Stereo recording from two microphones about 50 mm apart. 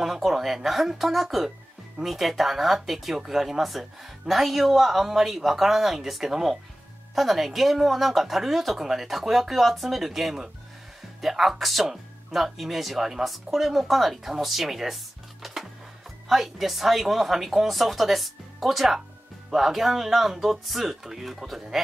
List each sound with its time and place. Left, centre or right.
0.0 s speech: centre
15.4 s music: centre
16.3 s speech: centre